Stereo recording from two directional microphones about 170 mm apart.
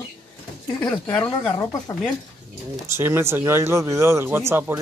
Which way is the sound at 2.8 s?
15° right (ahead or behind).